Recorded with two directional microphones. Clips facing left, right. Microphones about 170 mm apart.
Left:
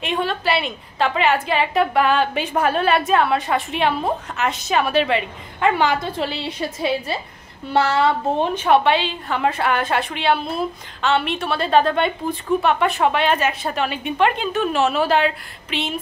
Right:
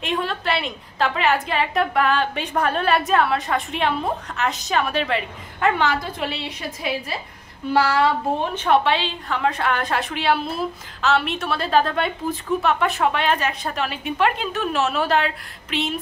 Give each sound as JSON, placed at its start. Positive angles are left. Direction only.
{"t": 0.0, "sound": "a woman's voice", "side_deg": 0}
{"t": 6.1, "sound": "a woman's voice", "side_deg": 30}
{"t": 7.7, "sound": "child singing", "side_deg": 25}
{"t": 8.5, "sound": "a woman's voice", "side_deg": 5}